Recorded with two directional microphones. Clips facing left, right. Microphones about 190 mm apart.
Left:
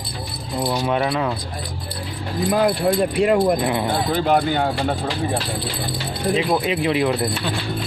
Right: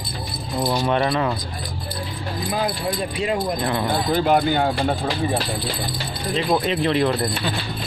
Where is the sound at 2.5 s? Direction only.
60° left (ahead or behind).